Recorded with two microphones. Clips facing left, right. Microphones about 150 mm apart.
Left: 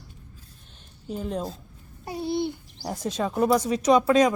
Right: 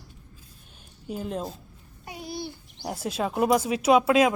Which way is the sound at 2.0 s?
35° left (ahead or behind).